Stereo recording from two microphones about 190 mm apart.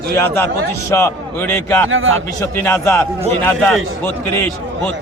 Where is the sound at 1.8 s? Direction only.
90° right.